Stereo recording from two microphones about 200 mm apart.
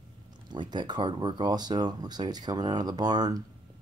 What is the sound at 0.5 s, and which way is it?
Speech, 20° right (ahead or behind).